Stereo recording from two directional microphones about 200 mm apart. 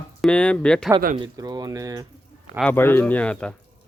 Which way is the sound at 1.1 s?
20° right (ahead or behind).